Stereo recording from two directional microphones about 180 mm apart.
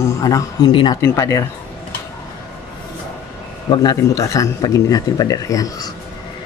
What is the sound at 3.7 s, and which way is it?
Speech, 20° left (ahead or behind).